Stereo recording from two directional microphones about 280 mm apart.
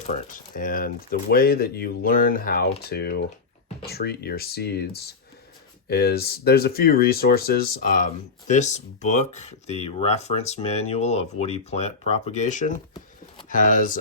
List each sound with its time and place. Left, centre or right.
0.3 s speech: left